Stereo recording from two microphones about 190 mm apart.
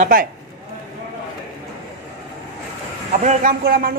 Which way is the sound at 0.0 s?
45° right (ahead or behind).